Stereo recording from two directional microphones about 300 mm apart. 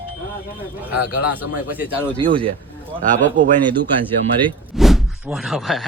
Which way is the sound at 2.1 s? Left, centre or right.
Centre.